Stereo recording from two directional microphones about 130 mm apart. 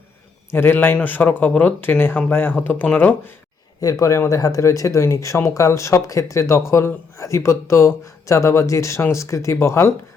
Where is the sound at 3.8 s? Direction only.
25° left (ahead or behind).